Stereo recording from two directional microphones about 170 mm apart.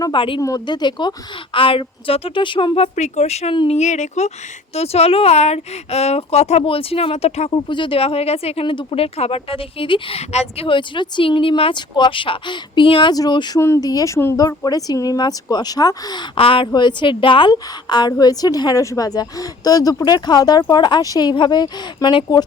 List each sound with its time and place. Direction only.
0.0 s a woman's voice: 30° left (ahead or behind)
3.8 s speech: 45° left (ahead or behind); by 22.4 s 25° left (ahead or behind)